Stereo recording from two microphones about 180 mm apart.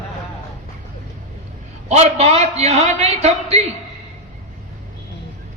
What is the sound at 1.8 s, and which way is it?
A man's voice, 35° right (ahead or behind).